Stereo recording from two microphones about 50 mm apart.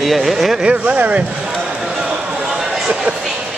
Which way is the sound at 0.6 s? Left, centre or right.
Right.